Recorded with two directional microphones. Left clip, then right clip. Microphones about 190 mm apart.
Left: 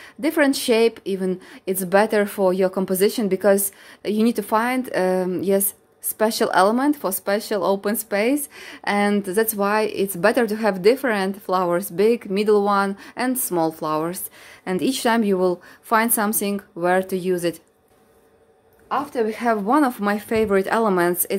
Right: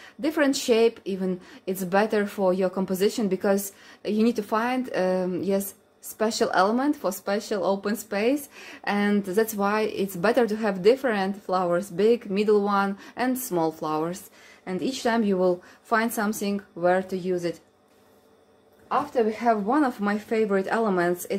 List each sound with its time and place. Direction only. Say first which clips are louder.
0.0 s speech: left 5 dB; 30° left (ahead or behind)
14.6 s speech: left 6 dB; 50° left (ahead or behind)
18.9 s a woman's voice: left 1 dB; 45° left (ahead or behind)